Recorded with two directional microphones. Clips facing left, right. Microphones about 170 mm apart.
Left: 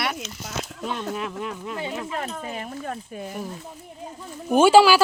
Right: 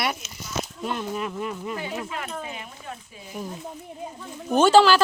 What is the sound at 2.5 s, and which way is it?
Speech, 45° left (ahead or behind).